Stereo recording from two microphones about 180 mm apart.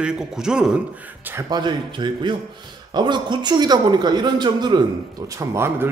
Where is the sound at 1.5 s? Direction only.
25° right (ahead or behind).